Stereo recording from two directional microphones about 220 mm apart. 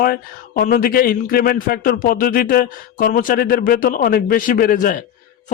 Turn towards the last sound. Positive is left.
turn(degrees=40)  # may be behind; listen again after turning